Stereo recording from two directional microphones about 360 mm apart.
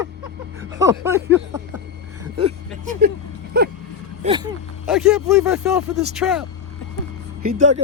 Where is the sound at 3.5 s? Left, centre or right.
Right.